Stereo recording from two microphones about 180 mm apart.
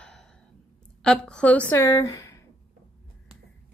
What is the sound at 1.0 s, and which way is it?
Speech, 5° left (ahead or behind).